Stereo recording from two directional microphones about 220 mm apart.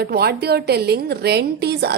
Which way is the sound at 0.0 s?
45° right (ahead or behind).